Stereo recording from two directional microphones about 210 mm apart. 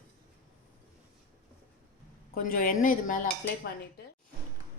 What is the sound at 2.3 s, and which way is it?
Speech, 40° left (ahead or behind).